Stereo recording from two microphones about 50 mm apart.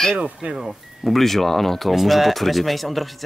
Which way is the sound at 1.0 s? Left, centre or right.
Centre.